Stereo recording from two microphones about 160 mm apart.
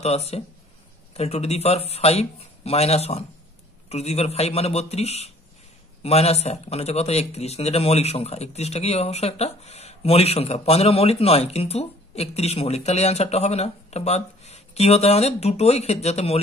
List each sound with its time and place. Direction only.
0.0 s a man's voice: 40° left (ahead or behind)